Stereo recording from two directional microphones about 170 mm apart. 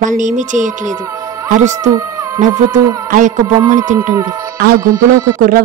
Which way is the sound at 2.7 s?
20° right (ahead or behind).